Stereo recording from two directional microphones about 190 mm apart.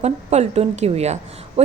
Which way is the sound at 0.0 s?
35° right (ahead or behind).